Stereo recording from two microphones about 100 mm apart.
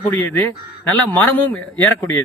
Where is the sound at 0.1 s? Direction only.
15° left (ahead or behind).